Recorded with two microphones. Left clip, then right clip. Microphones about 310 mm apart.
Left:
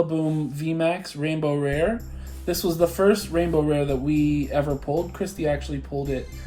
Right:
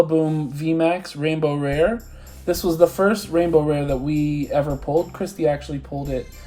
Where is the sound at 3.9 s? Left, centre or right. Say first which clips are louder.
Even; centre.